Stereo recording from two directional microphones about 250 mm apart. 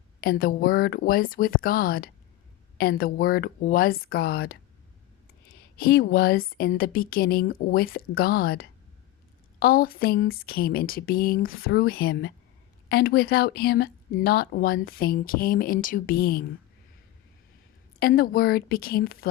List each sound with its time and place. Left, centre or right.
0.2 s a woman's voice: left
5.7 s a woman's voice: left
18.0 s a woman's voice: left